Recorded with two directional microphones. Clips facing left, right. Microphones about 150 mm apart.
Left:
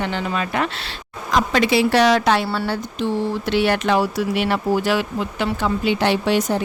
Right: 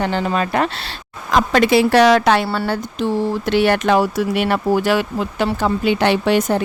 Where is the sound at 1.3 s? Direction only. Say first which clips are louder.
Right 4 dB; 55° right (ahead or behind).